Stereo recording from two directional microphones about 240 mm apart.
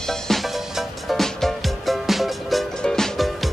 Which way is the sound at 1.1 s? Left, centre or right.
Centre.